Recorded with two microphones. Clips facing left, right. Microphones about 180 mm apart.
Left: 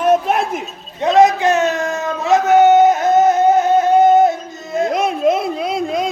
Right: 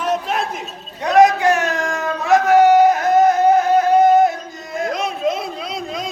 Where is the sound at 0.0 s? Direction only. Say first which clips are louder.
Left 6 dB; 55° left (ahead or behind).